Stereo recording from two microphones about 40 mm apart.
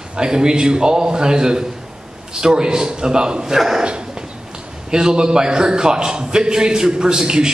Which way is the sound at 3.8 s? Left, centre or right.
Right.